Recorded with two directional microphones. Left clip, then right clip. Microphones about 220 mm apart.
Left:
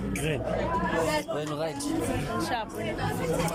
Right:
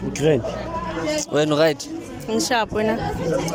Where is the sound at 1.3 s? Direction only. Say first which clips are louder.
Right 13 dB; 50° right (ahead or behind).